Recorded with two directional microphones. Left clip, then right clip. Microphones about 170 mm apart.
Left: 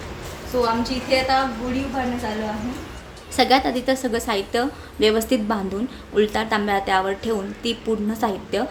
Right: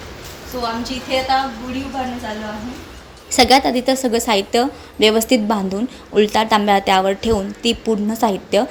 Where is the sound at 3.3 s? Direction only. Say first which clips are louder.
Right 5 dB; 30° right (ahead or behind).